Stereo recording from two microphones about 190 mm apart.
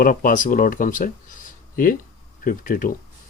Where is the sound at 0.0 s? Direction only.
50° left (ahead or behind).